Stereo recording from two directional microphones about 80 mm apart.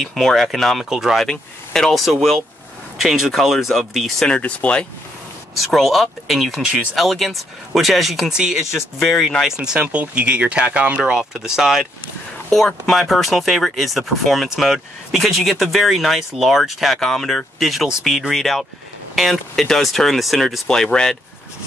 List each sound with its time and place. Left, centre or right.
0.0 s speech: centre
1.2 s speech: centre
4.3 s speech: centre
5.6 s speech: centre
6.6 s speech: centre
7.0 s speech: centre
9.0 s speech: centre
9.6 s speech: centre